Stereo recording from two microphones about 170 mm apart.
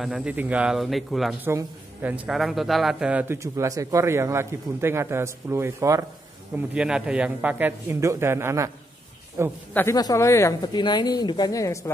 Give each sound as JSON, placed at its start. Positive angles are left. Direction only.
{"t": 0.0, "sound": "speech", "side_deg": -5}
{"t": 1.4, "sound": "a man's voice", "side_deg": -15}
{"t": 6.5, "sound": "a man's voice", "side_deg": -5}
{"t": 9.8, "sound": "speech", "side_deg": 20}